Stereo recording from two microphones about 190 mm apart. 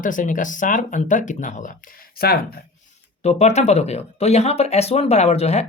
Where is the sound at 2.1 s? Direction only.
55° left (ahead or behind).